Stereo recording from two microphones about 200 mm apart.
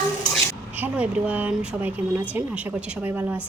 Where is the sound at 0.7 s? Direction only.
5° right (ahead or behind).